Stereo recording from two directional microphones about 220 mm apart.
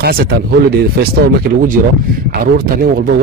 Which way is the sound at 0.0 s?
45° right (ahead or behind).